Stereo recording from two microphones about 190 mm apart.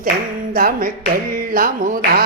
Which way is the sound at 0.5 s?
50° right (ahead or behind).